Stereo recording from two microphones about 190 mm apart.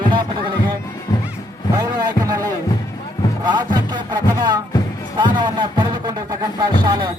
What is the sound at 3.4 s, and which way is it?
Speech, 25° right (ahead or behind).